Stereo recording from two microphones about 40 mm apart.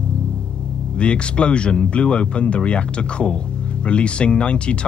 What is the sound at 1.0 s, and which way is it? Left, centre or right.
Speech, left.